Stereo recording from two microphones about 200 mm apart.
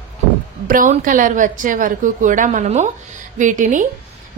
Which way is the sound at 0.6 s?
40° right (ahead or behind).